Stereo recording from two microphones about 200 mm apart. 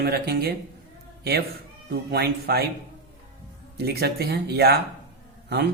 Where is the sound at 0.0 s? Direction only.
50° right (ahead or behind).